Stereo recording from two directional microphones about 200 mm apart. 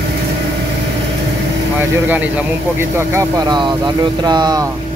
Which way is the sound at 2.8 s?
15° right (ahead or behind).